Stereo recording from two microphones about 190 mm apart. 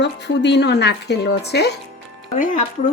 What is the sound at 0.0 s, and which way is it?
Speech, 65° left (ahead or behind).